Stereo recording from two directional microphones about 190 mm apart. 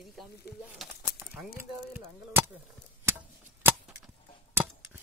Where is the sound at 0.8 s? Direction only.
5° right (ahead or behind).